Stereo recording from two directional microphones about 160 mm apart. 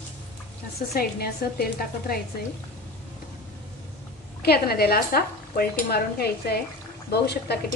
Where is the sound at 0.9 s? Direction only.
70° left (ahead or behind).